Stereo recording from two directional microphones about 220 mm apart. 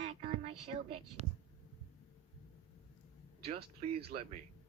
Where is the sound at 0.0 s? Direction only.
30° right (ahead or behind).